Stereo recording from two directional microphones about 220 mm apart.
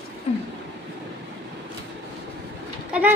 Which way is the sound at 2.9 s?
5° right (ahead or behind).